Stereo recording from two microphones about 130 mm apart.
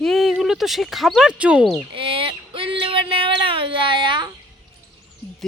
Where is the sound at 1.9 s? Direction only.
45° right (ahead or behind).